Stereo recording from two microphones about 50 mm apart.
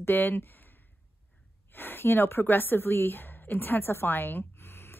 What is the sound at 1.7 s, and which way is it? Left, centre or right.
A woman's voice, left.